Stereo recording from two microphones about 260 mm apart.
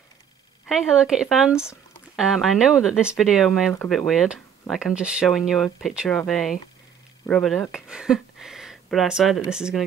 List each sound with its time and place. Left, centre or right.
0.7 s speech: centre